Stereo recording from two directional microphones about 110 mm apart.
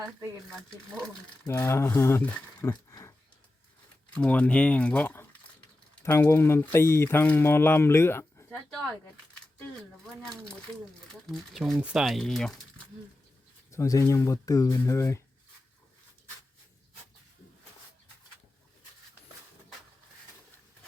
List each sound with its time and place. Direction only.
1.5 s speech: 25° left (ahead or behind)
4.1 s speech: 10° left (ahead or behind)
11.3 s speech: centre (ahead or behind)
13.7 s speech: 30° left (ahead or behind)